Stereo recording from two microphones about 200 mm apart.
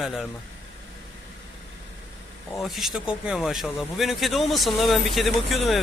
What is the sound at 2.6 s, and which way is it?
Speech, centre (ahead or behind).